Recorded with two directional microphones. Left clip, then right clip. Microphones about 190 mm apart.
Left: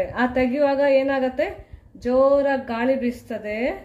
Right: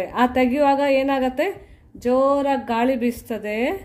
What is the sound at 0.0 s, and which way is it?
A woman's voice, 40° right (ahead or behind).